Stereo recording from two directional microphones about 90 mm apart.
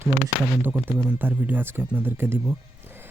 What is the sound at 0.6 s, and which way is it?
Speech, 20° right (ahead or behind).